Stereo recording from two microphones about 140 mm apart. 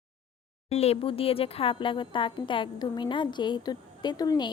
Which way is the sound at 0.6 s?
45° left (ahead or behind).